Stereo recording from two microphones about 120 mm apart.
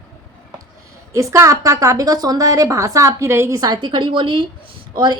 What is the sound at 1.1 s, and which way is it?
A woman's voice, 25° right (ahead or behind).